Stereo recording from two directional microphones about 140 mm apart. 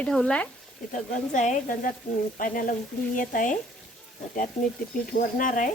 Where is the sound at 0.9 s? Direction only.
65° left (ahead or behind).